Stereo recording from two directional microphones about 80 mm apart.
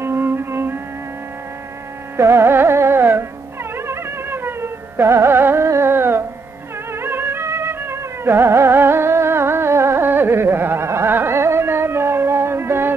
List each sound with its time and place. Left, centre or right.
0.0 s music: right
2.1 s music: right